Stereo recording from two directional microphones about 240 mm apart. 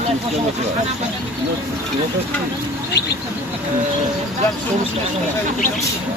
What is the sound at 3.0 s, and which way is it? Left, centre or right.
Bird, left.